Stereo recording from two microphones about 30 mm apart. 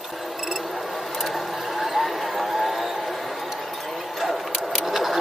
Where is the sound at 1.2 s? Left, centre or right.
Centre.